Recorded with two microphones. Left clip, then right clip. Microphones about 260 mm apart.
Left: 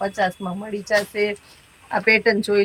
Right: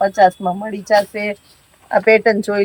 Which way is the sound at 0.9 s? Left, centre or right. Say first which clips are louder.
Right 5 dB; right.